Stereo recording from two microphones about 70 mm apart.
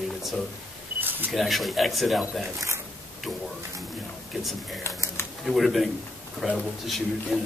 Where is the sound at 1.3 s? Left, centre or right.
Centre.